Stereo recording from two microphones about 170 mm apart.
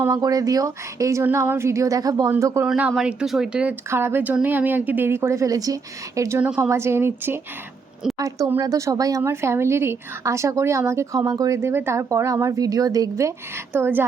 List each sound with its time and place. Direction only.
0.0 s speech: 20° right (ahead or behind)
2.6 s speech: 5° right (ahead or behind)